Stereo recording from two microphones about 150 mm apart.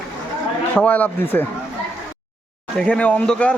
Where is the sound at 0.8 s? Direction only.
10° left (ahead or behind).